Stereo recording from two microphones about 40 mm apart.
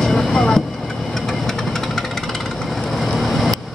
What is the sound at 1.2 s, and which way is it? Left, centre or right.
Engine, centre.